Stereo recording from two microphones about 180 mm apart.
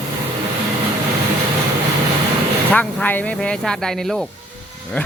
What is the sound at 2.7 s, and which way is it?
Speech, 10° left (ahead or behind).